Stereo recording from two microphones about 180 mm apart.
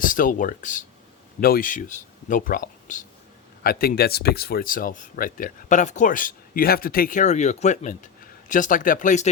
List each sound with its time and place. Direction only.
0.0 s speech: 50° left (ahead or behind)
3.6 s speech: 55° left (ahead or behind)